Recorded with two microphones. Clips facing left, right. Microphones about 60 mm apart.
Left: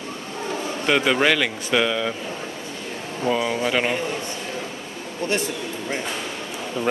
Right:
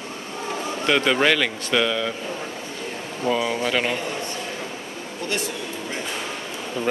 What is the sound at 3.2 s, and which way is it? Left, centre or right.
Speech, centre.